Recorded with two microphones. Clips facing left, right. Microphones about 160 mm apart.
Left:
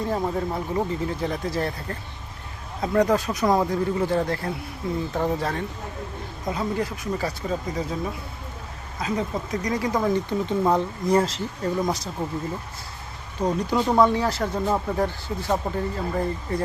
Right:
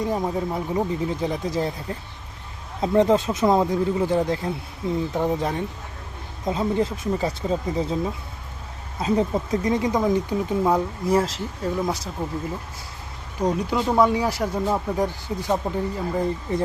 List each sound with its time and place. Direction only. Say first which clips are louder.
0.0 s speech: right 1 dB; 15° right (ahead or behind)
9.0 s speech: right 5 dB; 30° right (ahead or behind); by 11.9 s 5° right (ahead or behind)
13.4 s speech: even; 10° right (ahead or behind)